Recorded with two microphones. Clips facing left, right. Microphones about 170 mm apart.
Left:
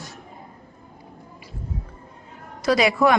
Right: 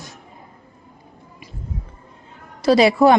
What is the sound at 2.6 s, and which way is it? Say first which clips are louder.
Speech: right 5 dB; 30° right (ahead or behind).